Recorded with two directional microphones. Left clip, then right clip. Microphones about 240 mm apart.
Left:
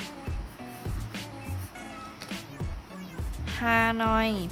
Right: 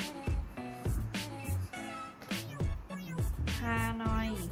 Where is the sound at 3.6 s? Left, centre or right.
Left.